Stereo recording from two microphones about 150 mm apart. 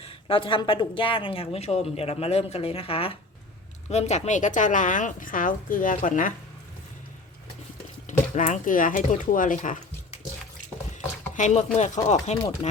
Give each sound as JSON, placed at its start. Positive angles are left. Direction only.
{"t": 0.0, "sound": "speech", "side_deg": 35}
{"t": 3.8, "sound": "a woman's voice", "side_deg": 50}
{"t": 8.0, "sound": "speech", "side_deg": 55}
{"t": 11.3, "sound": "speech", "side_deg": 50}